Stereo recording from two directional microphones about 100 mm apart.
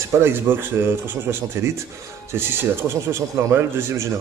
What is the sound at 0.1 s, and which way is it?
A man's voice, 20° right (ahead or behind).